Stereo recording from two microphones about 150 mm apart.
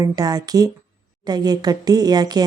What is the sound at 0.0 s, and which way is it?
Speech, 25° right (ahead or behind).